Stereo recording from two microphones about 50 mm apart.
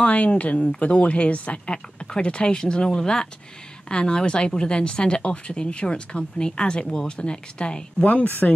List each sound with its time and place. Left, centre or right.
0.0 s speech: left
8.1 s speech: left